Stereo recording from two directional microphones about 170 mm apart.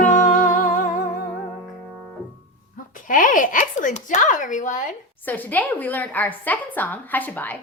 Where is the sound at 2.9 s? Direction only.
50° left (ahead or behind).